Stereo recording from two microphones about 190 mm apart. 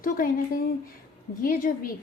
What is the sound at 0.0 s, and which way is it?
Speech, 50° left (ahead or behind).